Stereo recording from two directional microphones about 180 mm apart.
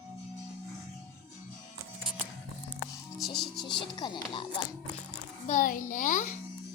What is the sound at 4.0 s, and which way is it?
Speech, 25° left (ahead or behind).